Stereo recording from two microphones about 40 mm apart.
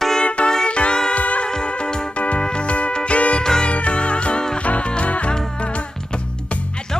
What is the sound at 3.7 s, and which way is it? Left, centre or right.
Music, left.